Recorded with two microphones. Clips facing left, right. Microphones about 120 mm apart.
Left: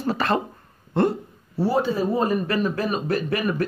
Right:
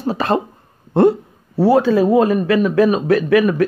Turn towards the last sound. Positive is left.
turn(degrees=-75)  # may be behind; listen again after turning